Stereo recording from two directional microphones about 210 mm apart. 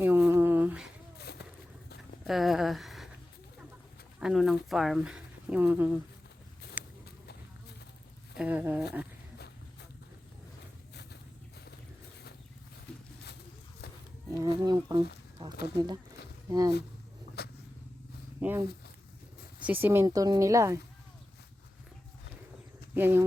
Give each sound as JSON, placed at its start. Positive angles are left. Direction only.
{"t": 0.0, "sound": "a sound", "side_deg": -10}
{"t": 1.3, "sound": "a sound", "side_deg": 50}
{"t": 2.2, "sound": "speech", "side_deg": 0}
{"t": 4.2, "sound": "speech", "side_deg": 0}
{"t": 6.8, "sound": "a sound", "side_deg": -5}
{"t": 8.4, "sound": "speech", "side_deg": -10}
{"t": 14.3, "sound": "speech", "side_deg": -20}
{"t": 16.5, "sound": "speech", "side_deg": -15}
{"t": 17.4, "sound": "vehicle", "side_deg": 50}
{"t": 18.3, "sound": "speech", "side_deg": -10}
{"t": 23.0, "sound": "speech", "side_deg": -10}